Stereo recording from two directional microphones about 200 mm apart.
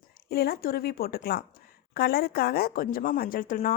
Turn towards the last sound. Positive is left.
turn(degrees=40)  # may be behind; listen again after turning